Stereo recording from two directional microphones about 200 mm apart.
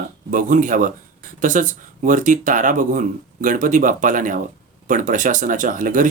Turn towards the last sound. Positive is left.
turn(degrees=-40)  # may be behind; listen again after turning